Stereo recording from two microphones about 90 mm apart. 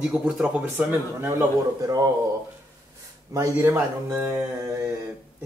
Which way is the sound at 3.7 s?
25° right (ahead or behind).